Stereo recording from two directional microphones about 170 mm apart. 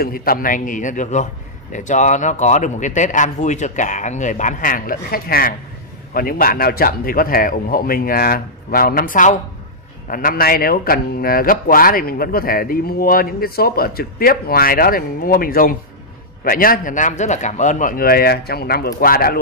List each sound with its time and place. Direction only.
0.0 s a man's voice: 60° left (ahead or behind)